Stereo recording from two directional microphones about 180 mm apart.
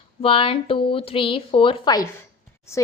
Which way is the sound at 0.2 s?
30° left (ahead or behind).